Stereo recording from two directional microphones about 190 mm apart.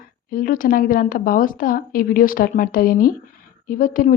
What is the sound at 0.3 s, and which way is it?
A woman's voice, 45° left (ahead or behind).